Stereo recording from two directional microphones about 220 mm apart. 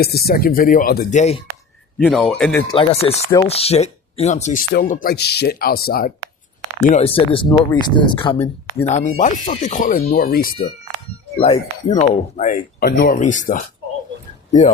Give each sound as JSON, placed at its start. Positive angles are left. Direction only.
{"t": 0.0, "sound": "speech", "side_deg": 45}
{"t": 2.0, "sound": "speech", "side_deg": 0}
{"t": 2.6, "sound": "speech", "side_deg": 25}
{"t": 6.9, "sound": "speech", "side_deg": 25}
{"t": 11.3, "sound": "speech", "side_deg": 30}